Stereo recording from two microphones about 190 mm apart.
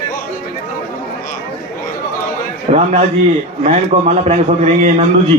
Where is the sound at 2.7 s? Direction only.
35° right (ahead or behind).